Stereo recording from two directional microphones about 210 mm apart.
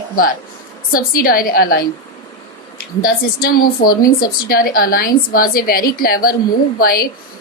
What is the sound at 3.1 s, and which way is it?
A woman's voice, 45° left (ahead or behind).